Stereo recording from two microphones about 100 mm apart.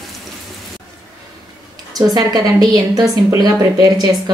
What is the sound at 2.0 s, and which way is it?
A woman's voice, 40° right (ahead or behind).